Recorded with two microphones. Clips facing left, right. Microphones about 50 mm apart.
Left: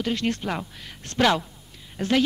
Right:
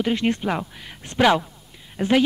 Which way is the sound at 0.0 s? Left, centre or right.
Centre.